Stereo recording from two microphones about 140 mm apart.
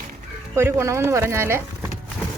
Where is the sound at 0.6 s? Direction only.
20° right (ahead or behind).